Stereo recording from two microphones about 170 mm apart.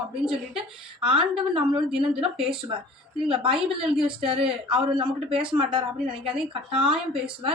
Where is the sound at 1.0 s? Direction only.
30° right (ahead or behind).